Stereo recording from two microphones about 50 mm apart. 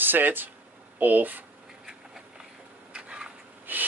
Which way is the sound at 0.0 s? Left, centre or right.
Right.